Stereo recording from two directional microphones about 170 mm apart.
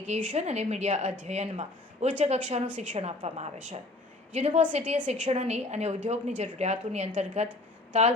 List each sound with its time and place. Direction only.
0.1 s a woman's voice: 45° right (ahead or behind)